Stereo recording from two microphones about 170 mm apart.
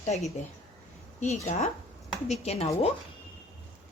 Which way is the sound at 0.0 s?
40° left (ahead or behind).